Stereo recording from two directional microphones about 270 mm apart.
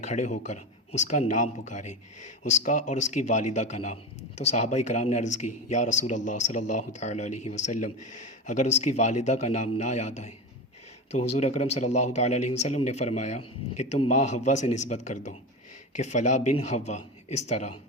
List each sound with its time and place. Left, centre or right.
0.0 s speech: left
11.3 s speech: left